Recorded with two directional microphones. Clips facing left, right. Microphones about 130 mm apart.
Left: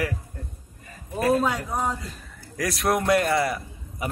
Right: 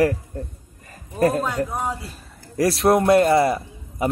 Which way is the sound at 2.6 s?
30° right (ahead or behind).